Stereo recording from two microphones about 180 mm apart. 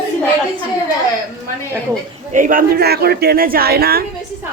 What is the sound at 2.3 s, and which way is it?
A woman's voice, 50° right (ahead or behind).